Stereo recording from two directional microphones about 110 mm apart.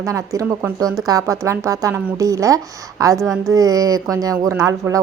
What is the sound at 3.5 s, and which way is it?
Speech, 30° right (ahead or behind).